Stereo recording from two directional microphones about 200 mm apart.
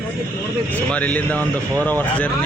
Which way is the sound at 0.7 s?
10° left (ahead or behind).